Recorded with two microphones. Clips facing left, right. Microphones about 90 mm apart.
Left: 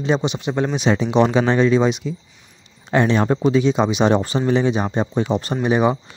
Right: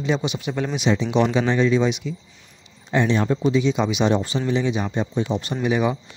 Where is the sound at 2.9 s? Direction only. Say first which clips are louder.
Left 3 dB; 60° left (ahead or behind); by 5.9 s 40° left (ahead or behind).